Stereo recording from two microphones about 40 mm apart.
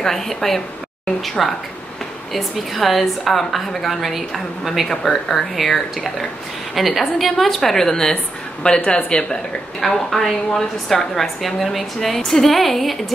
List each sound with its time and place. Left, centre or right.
0.0 s a woman's voice: centre
5.3 s a woman's voice: centre; by 9.4 s left
9.8 s a woman's voice: centre